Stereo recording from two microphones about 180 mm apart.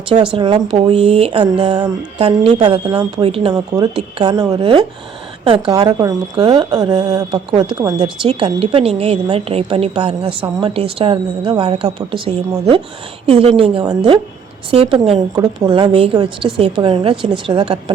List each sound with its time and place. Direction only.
0.3 s speech: 25° right (ahead or behind)
2.1 s speech: 35° right (ahead or behind)